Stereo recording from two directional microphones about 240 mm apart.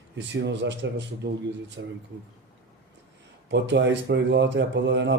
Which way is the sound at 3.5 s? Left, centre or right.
Right.